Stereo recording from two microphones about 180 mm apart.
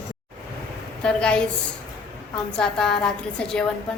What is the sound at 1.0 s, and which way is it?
A woman's voice, 5° left (ahead or behind).